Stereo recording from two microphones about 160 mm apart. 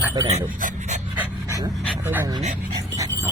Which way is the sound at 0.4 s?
50° right (ahead or behind).